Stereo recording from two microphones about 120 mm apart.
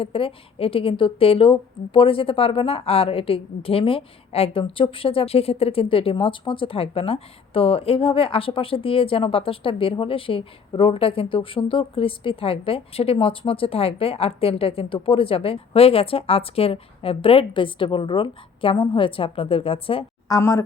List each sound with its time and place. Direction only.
0.0 s a woman's voice: 50° left (ahead or behind)
20.2 s a woman's voice: 30° left (ahead or behind)